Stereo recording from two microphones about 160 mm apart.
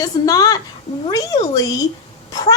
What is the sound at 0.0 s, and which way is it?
Speech, 25° left (ahead or behind).